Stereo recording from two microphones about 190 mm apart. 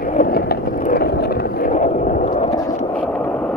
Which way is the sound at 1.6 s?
40° left (ahead or behind).